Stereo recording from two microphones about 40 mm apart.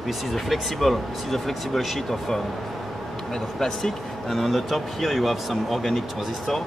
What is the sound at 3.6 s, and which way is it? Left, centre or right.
Speech, centre.